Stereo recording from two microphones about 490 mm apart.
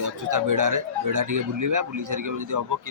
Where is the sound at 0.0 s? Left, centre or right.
Right.